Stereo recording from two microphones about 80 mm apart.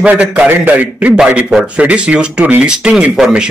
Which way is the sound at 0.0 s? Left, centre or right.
Centre.